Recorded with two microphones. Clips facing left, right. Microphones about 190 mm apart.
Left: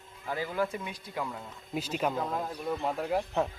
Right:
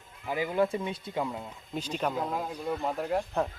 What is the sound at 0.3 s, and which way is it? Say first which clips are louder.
Speech: right 4 dB; 15° right (ahead or behind).